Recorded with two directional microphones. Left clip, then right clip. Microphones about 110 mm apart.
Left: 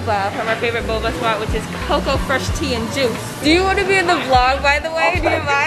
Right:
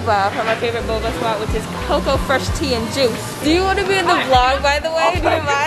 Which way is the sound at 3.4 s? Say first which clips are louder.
Left 1 dB; centre (ahead or behind).